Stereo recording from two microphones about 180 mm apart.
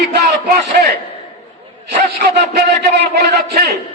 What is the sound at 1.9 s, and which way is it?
A man's voice, 65° right (ahead or behind).